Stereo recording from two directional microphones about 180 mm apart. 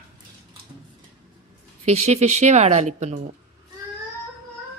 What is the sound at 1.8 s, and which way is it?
A woman's voice, 40° right (ahead or behind).